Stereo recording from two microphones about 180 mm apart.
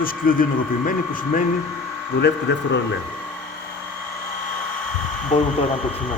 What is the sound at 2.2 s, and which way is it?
Speech, 70° left (ahead or behind).